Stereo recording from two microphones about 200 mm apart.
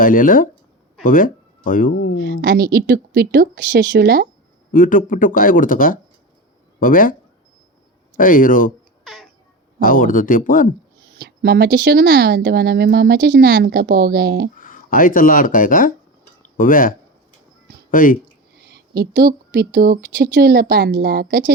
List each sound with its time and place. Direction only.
0.0 s speech: 45° left (ahead or behind)
2.2 s speech: 50° right (ahead or behind)
4.7 s speech: 45° left (ahead or behind)
9.0 s babbling: centre (ahead or behind)
9.8 s speech: 45° left (ahead or behind)
11.2 s speech: 55° right (ahead or behind)
14.6 s speech: 45° left (ahead or behind)
17.9 s speech: 45° left (ahead or behind)
18.7 s speech: 55° right (ahead or behind)